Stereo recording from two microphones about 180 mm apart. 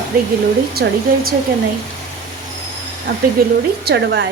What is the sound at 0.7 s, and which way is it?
Speech, 60° right (ahead or behind).